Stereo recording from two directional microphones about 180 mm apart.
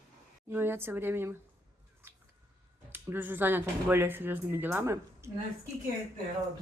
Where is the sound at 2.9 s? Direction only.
10° right (ahead or behind).